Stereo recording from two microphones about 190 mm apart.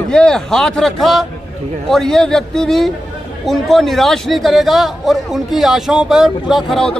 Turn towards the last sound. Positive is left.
turn(degrees=0)  # may be behind; listen again after turning